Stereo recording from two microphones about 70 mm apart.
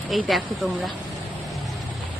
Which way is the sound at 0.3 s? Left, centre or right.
Centre.